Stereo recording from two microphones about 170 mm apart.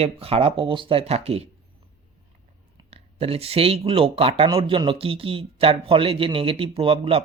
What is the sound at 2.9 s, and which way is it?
A man's voice, 35° right (ahead or behind).